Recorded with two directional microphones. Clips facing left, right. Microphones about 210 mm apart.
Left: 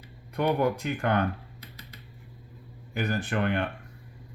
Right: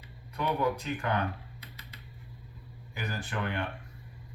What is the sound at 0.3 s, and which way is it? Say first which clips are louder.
Speech: left 5 dB; 60° left (ahead or behind).